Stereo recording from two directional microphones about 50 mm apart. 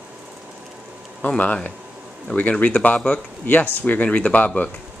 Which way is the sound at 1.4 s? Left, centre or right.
Left.